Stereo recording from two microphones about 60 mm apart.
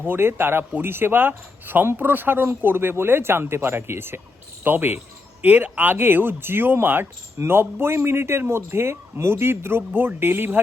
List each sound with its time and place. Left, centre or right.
0.1 s a man's voice: right